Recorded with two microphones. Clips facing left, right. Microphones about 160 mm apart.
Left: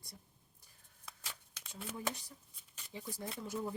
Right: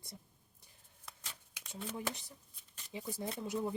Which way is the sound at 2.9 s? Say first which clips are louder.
Right 4 dB; 20° right (ahead or behind).